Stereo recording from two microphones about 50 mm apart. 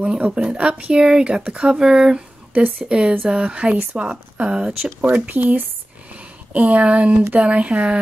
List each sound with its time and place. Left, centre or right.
0.0 s speech: right
2.5 s speech: right
2.9 s speech: centre
5.0 s speech: right